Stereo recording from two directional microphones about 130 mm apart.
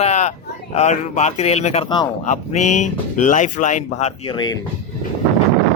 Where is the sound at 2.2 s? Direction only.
70° left (ahead or behind).